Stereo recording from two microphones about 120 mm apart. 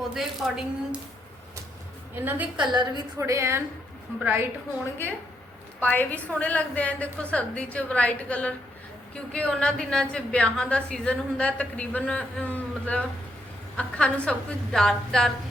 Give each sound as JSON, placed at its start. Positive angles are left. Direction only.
{"t": 0.1, "sound": "a woman's voice", "side_deg": -5}
{"t": 2.1, "sound": "a woman's voice", "side_deg": -15}
{"t": 5.8, "sound": "a woman's voice", "side_deg": 15}